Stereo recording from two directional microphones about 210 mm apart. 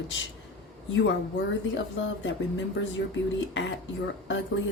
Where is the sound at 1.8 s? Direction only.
60° left (ahead or behind).